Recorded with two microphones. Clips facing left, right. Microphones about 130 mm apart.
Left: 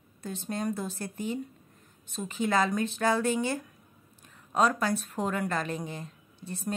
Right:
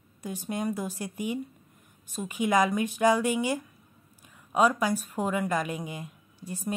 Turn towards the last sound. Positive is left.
turn(degrees=-10)  # may be behind; listen again after turning